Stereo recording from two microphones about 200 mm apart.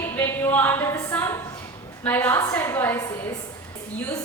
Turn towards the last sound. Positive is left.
turn(degrees=15)  # may be behind; listen again after turning